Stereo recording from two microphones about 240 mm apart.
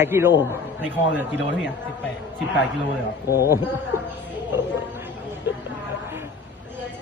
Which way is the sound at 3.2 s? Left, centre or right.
Left.